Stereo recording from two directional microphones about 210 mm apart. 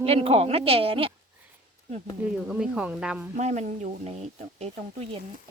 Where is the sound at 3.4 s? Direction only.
35° right (ahead or behind).